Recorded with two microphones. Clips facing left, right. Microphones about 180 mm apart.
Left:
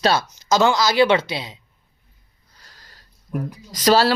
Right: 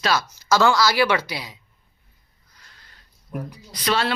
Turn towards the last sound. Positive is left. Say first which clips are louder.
# left 7 dB
turn(degrees=40)  # may be behind; listen again after turning